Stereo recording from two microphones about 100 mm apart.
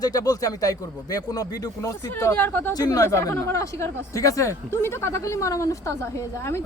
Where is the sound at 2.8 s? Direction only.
40° left (ahead or behind).